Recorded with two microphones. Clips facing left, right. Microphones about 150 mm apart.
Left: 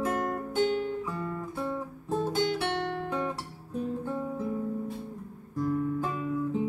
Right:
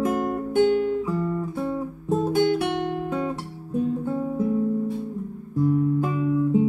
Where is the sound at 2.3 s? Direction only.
55° right (ahead or behind).